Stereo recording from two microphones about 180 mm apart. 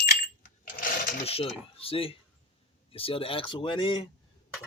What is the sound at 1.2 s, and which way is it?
Speech, 35° left (ahead or behind).